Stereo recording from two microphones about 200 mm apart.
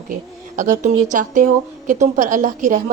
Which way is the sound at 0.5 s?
40° right (ahead or behind).